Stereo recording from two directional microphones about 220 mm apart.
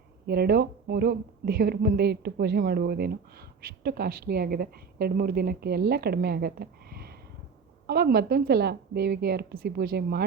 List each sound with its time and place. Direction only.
0.3 s a woman's voice: 45° right (ahead or behind)